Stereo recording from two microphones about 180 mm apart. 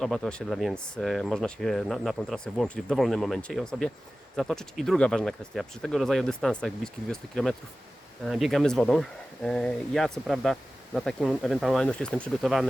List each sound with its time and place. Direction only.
0.0 s speech: centre (ahead or behind)